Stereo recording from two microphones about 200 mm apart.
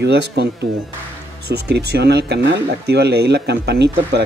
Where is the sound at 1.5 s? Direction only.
55° right (ahead or behind).